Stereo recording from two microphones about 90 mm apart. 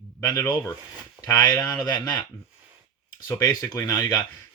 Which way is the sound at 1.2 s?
45° left (ahead or behind).